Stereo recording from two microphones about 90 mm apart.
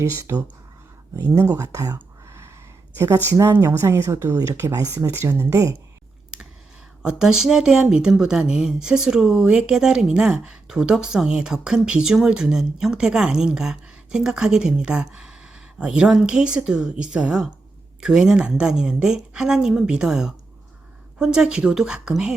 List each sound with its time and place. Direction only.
0.0 s speech: 35° right (ahead or behind)
3.3 s speech: 40° right (ahead or behind)
3.7 s speech: 30° right (ahead or behind)
7.0 s speech: 10° right (ahead or behind)